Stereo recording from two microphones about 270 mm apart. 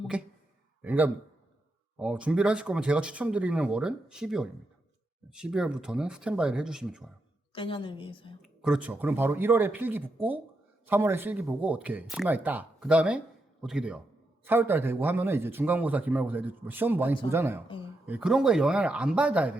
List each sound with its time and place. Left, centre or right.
0.1 s a man's voice: centre
7.5 s a woman's voice: centre
8.4 s a man's voice: centre